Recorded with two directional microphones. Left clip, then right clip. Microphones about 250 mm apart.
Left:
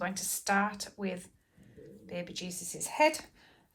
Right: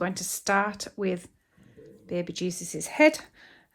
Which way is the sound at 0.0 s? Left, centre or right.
Right.